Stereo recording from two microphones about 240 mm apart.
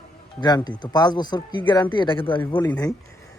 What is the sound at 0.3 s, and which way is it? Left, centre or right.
A man's voice, centre.